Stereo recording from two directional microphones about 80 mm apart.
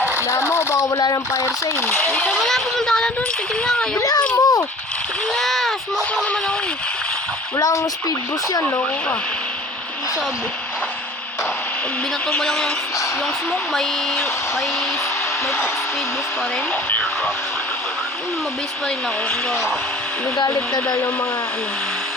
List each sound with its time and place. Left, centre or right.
0.3 s speech: left
1.9 s a child's voice: left
2.3 s speech: centre
3.9 s speech: left
5.3 s a child's voice: centre
7.5 s speech: left
12.4 s speech: centre
20.8 s speech: left